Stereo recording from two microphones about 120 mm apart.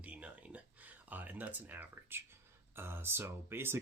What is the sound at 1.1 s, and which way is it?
Speech, 15° right (ahead or behind).